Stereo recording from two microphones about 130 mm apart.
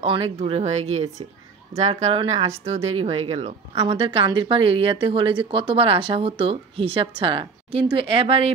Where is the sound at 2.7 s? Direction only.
50° right (ahead or behind).